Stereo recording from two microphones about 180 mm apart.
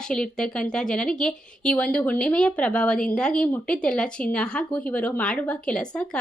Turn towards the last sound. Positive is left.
turn(degrees=5)  # may be behind; listen again after turning